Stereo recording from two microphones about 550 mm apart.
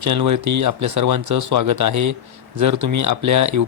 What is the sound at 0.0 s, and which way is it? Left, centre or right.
Speech, right.